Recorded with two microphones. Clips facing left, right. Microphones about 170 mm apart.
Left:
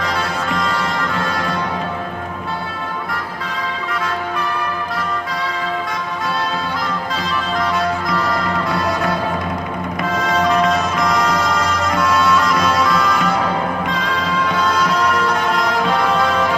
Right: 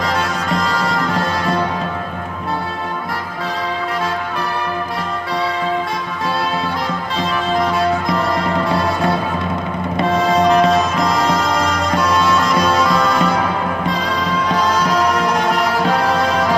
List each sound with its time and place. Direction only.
10.0 s music: 30° right (ahead or behind)
12.5 s music: 30° right (ahead or behind)